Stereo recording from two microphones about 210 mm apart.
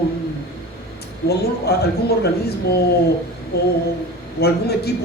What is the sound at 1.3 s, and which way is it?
A woman's voice, 50° left (ahead or behind).